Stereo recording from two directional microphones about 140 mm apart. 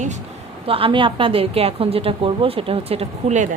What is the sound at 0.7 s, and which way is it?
A woman's voice, 40° right (ahead or behind).